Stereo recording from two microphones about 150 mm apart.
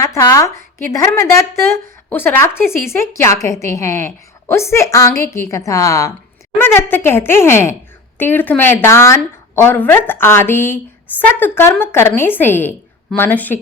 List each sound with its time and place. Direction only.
0.0 s a woman's voice: 20° left (ahead or behind)